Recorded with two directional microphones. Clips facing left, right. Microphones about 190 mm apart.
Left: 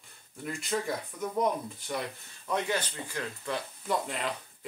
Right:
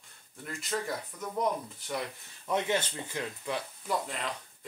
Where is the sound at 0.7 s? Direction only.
5° left (ahead or behind).